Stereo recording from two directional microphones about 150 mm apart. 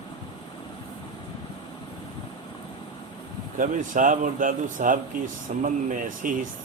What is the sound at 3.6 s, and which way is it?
Speech, 60° right (ahead or behind).